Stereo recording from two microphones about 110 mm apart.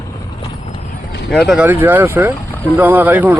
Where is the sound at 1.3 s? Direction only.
Centre (ahead or behind).